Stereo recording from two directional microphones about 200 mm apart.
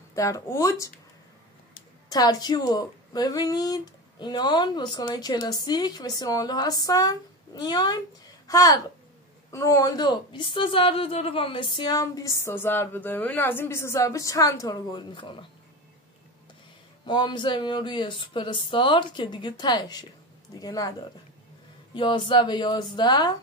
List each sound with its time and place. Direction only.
0.1 s a woman's voice: 15° left (ahead or behind)
2.0 s a woman's voice: 20° left (ahead or behind)
17.0 s a woman's voice: 20° left (ahead or behind)
21.9 s a woman's voice: 25° left (ahead or behind)